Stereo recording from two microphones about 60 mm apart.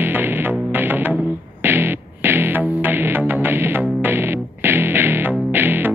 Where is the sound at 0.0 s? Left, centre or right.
Right.